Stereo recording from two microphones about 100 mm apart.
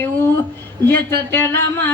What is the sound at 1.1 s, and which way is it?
Speech, 20° left (ahead or behind).